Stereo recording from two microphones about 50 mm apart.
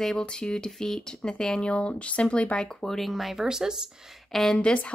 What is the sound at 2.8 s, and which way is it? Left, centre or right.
Speech, centre.